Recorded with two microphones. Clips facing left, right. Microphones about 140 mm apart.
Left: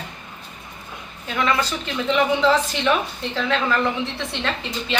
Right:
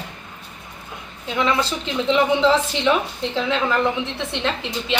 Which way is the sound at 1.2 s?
20° right (ahead or behind).